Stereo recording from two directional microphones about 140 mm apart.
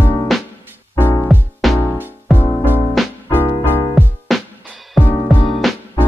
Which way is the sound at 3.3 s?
15° left (ahead or behind).